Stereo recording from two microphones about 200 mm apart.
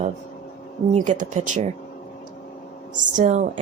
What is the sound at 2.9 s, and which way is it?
Speech, 40° right (ahead or behind).